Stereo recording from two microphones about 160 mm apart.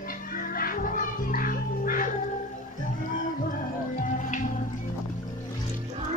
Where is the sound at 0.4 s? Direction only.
60° left (ahead or behind).